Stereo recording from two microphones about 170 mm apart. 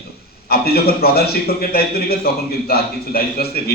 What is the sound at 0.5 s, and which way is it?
A man's voice, 65° left (ahead or behind).